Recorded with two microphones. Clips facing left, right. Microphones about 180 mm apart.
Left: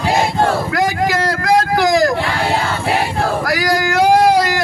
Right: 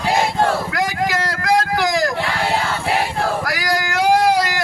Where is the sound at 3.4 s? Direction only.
30° left (ahead or behind).